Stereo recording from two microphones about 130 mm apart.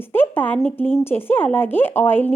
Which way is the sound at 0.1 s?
15° left (ahead or behind).